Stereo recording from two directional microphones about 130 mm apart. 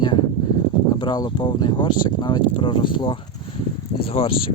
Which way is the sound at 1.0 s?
35° left (ahead or behind).